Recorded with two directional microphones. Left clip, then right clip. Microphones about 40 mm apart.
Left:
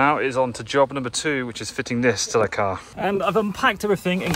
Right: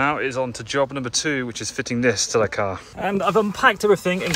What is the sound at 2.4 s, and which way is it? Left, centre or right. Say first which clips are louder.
Speech: even; right.